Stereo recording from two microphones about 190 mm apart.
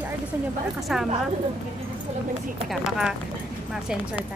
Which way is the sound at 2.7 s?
Centre (ahead or behind).